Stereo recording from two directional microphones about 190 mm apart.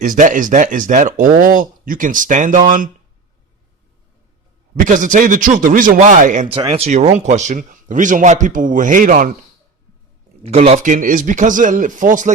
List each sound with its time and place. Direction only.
0.0 s speech: 45° right (ahead or behind)
4.8 s speech: 45° right (ahead or behind)
6.5 s speech: 25° right (ahead or behind); by 9.3 s 45° right (ahead or behind)
10.4 s speech: 35° right (ahead or behind)